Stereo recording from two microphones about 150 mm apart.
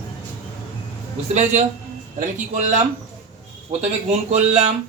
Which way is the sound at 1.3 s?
55° right (ahead or behind).